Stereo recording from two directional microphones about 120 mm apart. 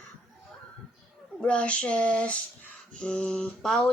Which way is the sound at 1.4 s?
10° left (ahead or behind).